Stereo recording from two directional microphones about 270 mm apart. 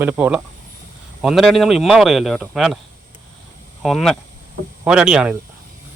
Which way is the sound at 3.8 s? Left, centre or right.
Centre.